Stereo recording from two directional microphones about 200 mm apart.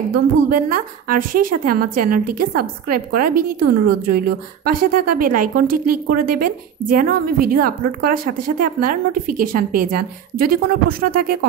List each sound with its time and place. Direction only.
0.1 s a woman's voice: 45° right (ahead or behind)